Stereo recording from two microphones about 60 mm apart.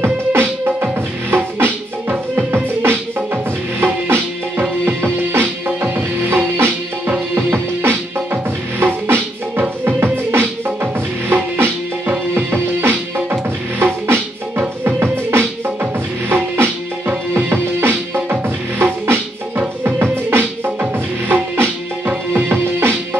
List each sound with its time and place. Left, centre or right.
0.0 s music: right
20.0 s music: right